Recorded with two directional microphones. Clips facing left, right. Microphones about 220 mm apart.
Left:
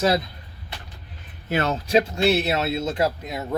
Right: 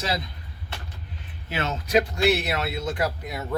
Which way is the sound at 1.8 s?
25° left (ahead or behind).